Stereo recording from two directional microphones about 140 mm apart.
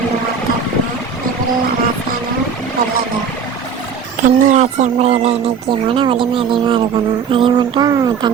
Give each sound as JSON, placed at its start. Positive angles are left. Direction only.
{"t": 4.2, "sound": "speech", "side_deg": -55}
{"t": 5.9, "sound": "a sound", "side_deg": -40}
{"t": 7.9, "sound": "speech", "side_deg": -25}